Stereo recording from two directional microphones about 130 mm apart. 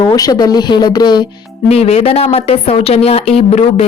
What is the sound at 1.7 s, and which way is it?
Speech, 50° left (ahead or behind).